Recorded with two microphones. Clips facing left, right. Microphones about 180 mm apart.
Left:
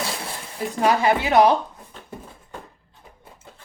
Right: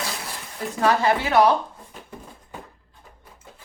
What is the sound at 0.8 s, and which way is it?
Speech, 15° left (ahead or behind).